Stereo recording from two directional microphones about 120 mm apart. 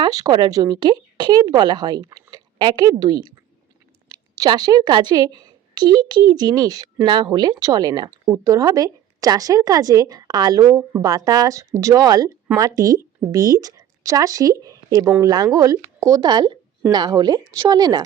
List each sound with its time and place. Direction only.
0.0 s a woman's voice: 35° right (ahead or behind)